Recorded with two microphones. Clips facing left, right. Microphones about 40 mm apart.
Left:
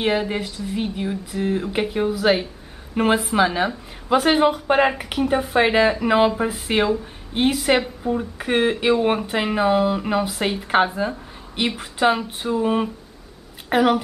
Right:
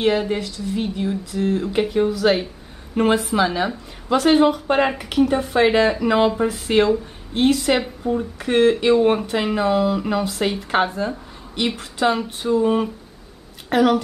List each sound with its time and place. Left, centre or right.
0.0 s a woman's voice: centre